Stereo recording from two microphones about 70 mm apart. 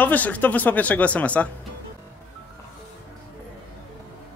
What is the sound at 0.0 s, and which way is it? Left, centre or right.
Speech, left.